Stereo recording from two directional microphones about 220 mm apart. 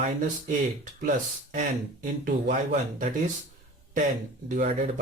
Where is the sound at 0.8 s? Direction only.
35° right (ahead or behind).